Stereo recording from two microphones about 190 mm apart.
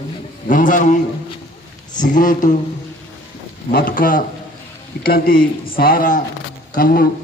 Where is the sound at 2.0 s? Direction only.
45° left (ahead or behind).